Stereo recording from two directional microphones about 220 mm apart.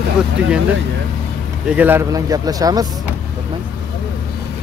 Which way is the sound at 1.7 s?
10° right (ahead or behind).